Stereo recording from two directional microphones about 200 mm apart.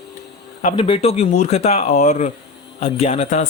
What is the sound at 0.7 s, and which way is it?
Speech, 30° left (ahead or behind).